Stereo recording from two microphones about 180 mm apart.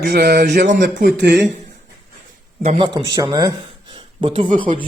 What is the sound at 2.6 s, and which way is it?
Speech, 35° right (ahead or behind).